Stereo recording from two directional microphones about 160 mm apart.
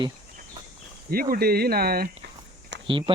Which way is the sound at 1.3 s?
75° right (ahead or behind).